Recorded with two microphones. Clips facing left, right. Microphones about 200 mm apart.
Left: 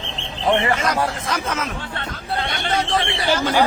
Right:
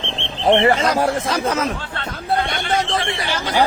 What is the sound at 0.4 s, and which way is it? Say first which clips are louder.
Speech: right 4 dB; 35° right (ahead or behind).